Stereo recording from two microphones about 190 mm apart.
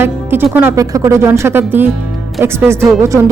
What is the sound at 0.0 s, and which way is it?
Speech, 10° right (ahead or behind).